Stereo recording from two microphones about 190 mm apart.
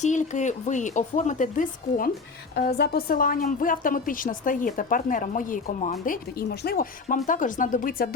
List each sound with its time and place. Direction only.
0.0 s speech: 40° left (ahead or behind)
2.6 s a woman's voice: 60° left (ahead or behind)